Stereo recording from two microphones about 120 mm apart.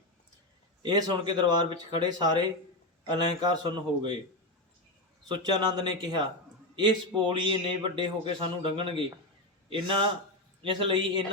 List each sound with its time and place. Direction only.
0.8 s speech: 35° right (ahead or behind)
5.3 s a man's voice: 35° right (ahead or behind)